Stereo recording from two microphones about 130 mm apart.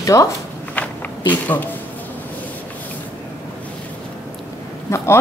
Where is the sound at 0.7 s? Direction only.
10° left (ahead or behind).